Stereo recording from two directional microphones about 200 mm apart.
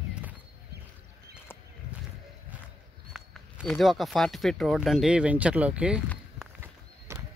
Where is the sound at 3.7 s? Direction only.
Centre (ahead or behind).